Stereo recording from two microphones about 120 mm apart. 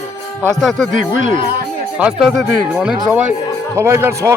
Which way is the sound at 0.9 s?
90° right.